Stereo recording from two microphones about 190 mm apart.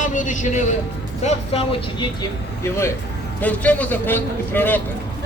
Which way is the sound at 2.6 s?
15° left (ahead or behind).